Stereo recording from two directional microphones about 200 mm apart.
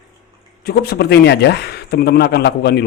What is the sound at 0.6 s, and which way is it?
A man's voice, 50° left (ahead or behind).